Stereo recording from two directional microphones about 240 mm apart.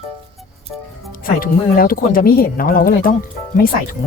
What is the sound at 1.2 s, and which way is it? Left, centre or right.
Speech, left.